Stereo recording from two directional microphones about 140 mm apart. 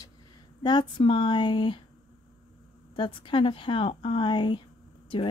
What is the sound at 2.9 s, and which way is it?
Speech, 35° left (ahead or behind).